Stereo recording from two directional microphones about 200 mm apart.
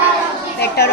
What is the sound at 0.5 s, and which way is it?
Speech, 55° left (ahead or behind).